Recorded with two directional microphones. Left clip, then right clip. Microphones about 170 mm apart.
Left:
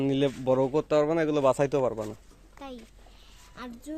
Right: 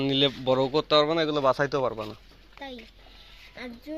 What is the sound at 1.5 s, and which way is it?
Speech, 55° left (ahead or behind).